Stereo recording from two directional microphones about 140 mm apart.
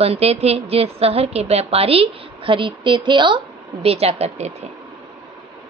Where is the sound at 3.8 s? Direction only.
45° right (ahead or behind).